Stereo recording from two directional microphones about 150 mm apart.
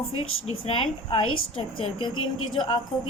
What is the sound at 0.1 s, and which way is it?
A woman's voice, 40° left (ahead or behind).